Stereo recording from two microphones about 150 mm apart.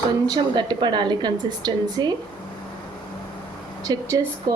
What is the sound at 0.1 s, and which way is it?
A woman's voice, 30° right (ahead or behind).